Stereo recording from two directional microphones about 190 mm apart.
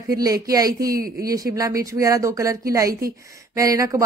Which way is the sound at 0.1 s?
20° right (ahead or behind).